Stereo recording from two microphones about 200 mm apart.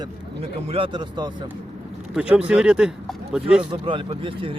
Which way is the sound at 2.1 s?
5° right (ahead or behind).